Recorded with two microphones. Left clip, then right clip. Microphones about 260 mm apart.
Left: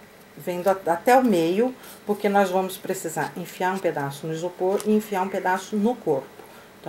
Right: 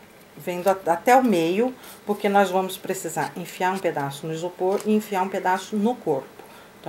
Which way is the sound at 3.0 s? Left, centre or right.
Centre.